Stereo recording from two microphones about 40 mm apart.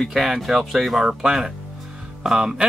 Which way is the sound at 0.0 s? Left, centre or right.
Centre.